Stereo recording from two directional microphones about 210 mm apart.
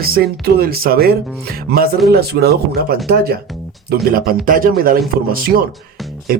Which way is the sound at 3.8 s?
45° right (ahead or behind).